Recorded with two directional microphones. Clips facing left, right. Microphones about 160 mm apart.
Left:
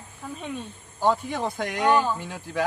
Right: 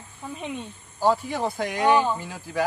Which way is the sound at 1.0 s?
5° right (ahead or behind).